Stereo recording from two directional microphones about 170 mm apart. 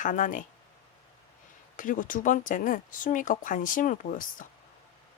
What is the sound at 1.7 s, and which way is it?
Speech, 50° left (ahead or behind).